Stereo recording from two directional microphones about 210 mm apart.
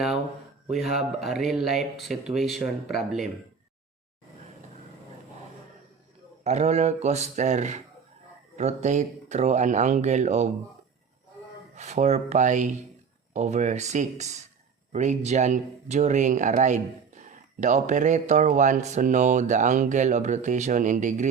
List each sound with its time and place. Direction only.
1.2 s speech: centre (ahead or behind)
6.4 s speech: 30° right (ahead or behind)
11.7 s speech: 35° right (ahead or behind)